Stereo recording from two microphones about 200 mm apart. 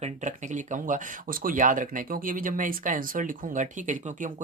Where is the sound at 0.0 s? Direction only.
40° right (ahead or behind).